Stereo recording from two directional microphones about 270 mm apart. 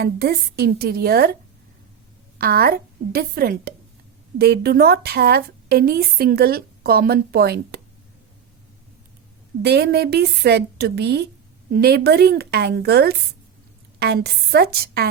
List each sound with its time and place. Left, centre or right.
0.0 s a woman's voice: right
2.4 s a woman's voice: right
9.6 s a woman's voice: right